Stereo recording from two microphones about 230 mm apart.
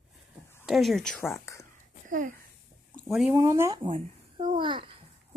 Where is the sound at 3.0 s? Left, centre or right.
Centre.